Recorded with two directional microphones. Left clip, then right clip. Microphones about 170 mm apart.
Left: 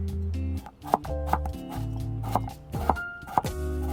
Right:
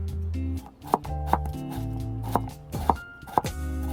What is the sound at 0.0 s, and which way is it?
Chopping, centre (ahead or behind).